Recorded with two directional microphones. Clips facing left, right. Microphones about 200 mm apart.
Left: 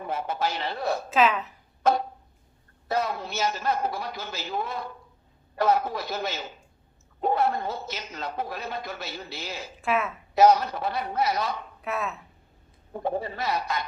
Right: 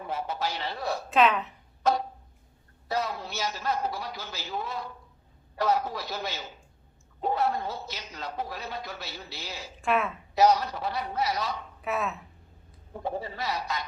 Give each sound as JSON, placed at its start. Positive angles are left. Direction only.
{"t": 0.1, "sound": "a man's voice", "side_deg": 55}
{"t": 1.1, "sound": "a woman's voice", "side_deg": 0}
{"t": 1.8, "sound": "a sound", "side_deg": 55}
{"t": 2.9, "sound": "a man's voice", "side_deg": 55}
{"t": 9.8, "sound": "a woman's voice", "side_deg": 0}
{"t": 10.3, "sound": "a man's voice", "side_deg": 55}
{"t": 11.8, "sound": "a woman's voice", "side_deg": 0}
{"t": 13.0, "sound": "a man's voice", "side_deg": 55}